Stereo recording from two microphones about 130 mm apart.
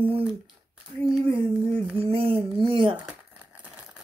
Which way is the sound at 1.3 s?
45° right (ahead or behind).